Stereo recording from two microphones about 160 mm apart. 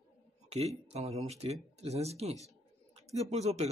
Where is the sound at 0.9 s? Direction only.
40° right (ahead or behind).